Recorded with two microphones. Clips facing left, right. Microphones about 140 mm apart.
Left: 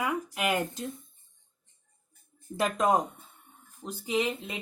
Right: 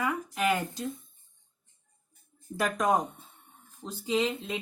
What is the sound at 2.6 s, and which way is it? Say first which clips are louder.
Speech: left 1 dB; 20° left (ahead or behind).